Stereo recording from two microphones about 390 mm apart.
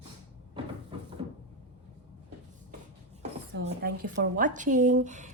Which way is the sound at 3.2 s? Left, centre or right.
Right.